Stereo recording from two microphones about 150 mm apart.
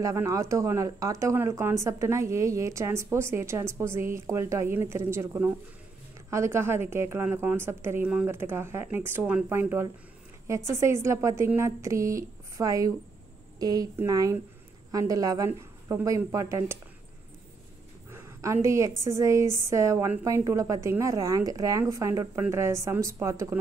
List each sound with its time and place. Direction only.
0.0 s a woman's voice: 20° right (ahead or behind)
18.1 s speech: 20° right (ahead or behind)